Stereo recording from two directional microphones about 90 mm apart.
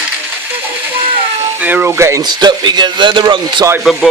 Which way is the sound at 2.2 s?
55° right (ahead or behind).